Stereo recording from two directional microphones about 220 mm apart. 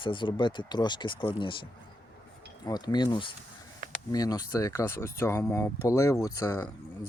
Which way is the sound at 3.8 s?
40° right (ahead or behind).